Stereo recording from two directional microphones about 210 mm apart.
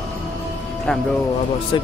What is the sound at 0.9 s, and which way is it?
Speech, 5° left (ahead or behind).